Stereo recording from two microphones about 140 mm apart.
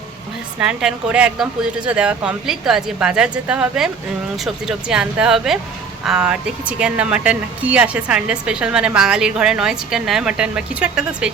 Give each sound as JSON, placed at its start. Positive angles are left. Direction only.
{"t": 0.6, "sound": "speech", "side_deg": -5}